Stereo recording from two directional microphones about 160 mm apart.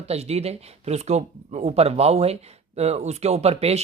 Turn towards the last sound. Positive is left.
turn(degrees=-40)  # may be behind; listen again after turning